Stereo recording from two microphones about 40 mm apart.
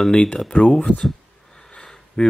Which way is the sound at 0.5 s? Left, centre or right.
Left.